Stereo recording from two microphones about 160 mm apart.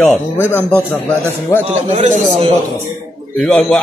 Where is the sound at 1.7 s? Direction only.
40° right (ahead or behind).